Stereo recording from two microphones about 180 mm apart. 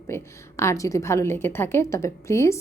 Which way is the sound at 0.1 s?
15° left (ahead or behind).